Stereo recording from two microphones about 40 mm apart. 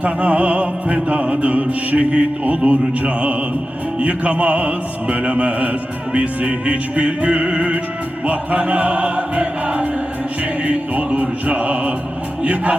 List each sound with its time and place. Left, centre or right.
0.0 s music: right
12.4 s a man's voice: right